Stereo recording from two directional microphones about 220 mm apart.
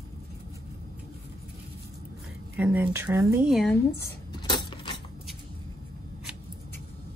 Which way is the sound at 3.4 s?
Centre (ahead or behind).